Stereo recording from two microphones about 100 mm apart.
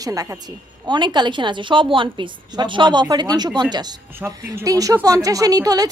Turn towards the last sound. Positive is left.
turn(degrees=-40)  # may be behind; listen again after turning